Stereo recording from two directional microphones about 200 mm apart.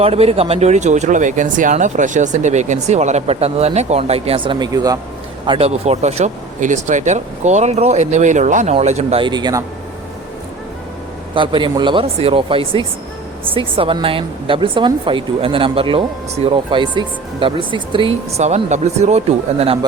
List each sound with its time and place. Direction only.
0.0 s speech: 30° right (ahead or behind)
5.5 s speech: 30° right (ahead or behind)
11.3 s speech: 25° right (ahead or behind)